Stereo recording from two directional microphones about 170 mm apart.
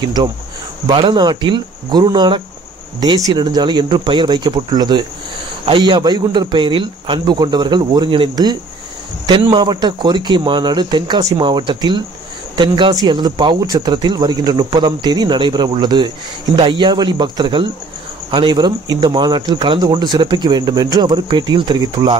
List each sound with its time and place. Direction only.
0.0 s speech: 25° right (ahead or behind)